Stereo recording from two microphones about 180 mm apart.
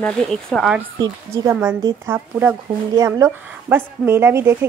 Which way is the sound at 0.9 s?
20° right (ahead or behind).